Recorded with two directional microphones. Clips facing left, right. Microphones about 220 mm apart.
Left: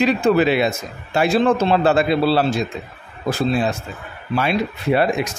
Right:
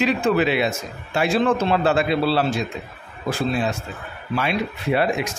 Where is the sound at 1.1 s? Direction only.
40° left (ahead or behind).